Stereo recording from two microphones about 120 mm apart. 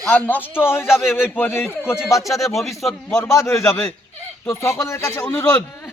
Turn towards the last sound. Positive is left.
turn(degrees=20)  # may be behind; listen again after turning